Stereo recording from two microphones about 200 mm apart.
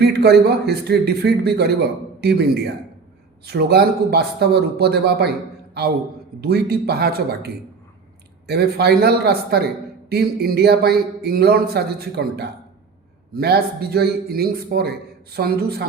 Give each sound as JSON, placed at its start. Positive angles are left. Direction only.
{"t": 0.0, "sound": "speech", "side_deg": -55}
{"t": 6.4, "sound": "speech", "side_deg": -55}